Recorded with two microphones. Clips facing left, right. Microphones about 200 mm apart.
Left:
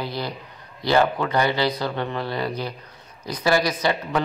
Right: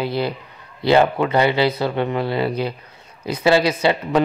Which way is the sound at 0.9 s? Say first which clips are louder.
Right 4 dB; 20° right (ahead or behind).